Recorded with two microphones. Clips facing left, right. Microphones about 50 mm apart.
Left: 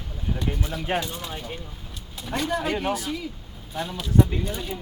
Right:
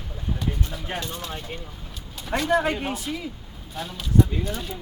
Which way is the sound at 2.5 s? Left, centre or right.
Centre.